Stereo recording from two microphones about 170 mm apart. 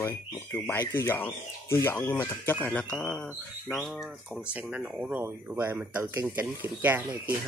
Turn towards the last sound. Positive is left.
turn(degrees=-10)  # may be behind; listen again after turning